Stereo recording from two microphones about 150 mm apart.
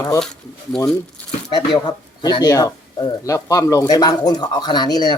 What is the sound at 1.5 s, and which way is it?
Speech, 30° left (ahead or behind).